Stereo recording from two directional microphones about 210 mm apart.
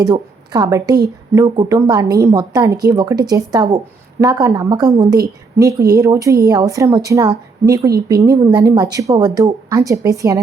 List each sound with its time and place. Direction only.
0.0 s a woman's voice: 20° right (ahead or behind)